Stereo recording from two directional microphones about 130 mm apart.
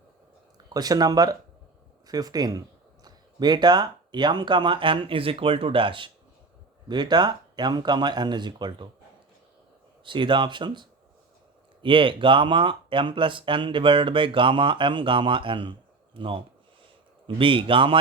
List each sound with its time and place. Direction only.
0.7 s speech: 30° right (ahead or behind)
10.0 s speech: 40° right (ahead or behind)